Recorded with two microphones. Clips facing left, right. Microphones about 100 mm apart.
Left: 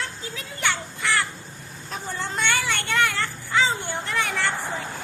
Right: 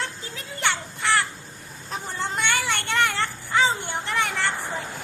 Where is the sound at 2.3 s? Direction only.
20° right (ahead or behind).